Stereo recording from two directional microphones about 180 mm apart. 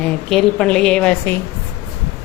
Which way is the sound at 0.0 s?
Centre (ahead or behind).